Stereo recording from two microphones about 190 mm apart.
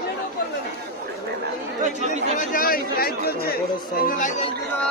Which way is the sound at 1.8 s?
40° right (ahead or behind).